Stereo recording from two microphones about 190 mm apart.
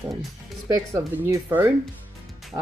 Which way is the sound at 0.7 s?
15° right (ahead or behind).